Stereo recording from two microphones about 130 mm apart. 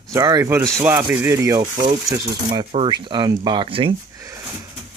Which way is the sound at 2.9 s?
35° right (ahead or behind).